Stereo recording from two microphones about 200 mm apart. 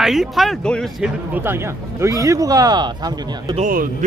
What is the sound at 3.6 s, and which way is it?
Speech, 40° right (ahead or behind).